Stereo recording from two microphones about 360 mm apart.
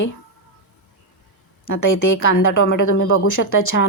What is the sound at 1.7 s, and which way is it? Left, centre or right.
Speech, left.